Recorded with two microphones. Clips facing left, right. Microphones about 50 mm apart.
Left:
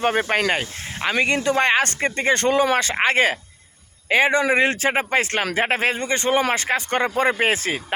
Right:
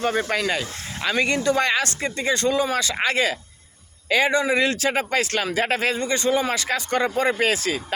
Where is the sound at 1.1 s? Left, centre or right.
Left.